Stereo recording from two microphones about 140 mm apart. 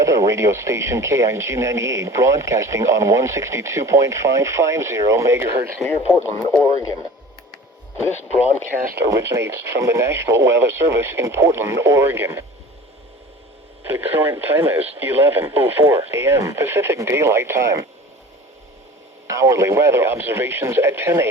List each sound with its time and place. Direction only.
0.0 s speech: 20° right (ahead or behind)
6.6 s speech: 25° left (ahead or behind)
9.0 s speech: 20° right (ahead or behind)
13.8 s speech: 15° right (ahead or behind)
19.3 s speech: 20° right (ahead or behind)